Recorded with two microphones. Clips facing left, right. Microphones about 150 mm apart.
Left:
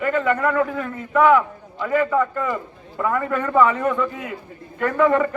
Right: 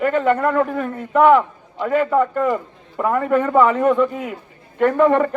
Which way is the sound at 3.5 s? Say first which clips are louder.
Right 2 dB; 35° right (ahead or behind).